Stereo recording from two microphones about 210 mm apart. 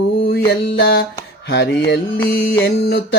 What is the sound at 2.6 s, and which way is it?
Speech, 50° left (ahead or behind).